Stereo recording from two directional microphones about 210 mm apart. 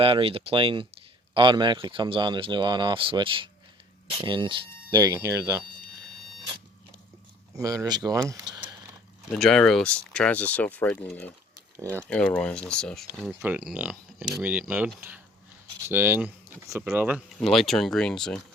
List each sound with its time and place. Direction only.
0.0 s speech: 25° right (ahead or behind)
7.5 s speech: 15° right (ahead or behind)
9.3 s speech: 5° left (ahead or behind)